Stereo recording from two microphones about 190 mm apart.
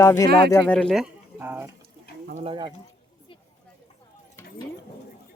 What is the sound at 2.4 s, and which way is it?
Speech, 25° right (ahead or behind).